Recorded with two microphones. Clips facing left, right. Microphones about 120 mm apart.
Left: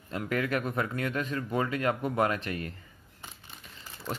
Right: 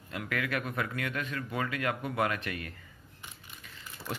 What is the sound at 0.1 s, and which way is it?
Speech, 35° left (ahead or behind).